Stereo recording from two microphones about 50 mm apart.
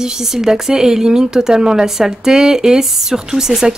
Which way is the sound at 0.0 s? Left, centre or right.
Centre.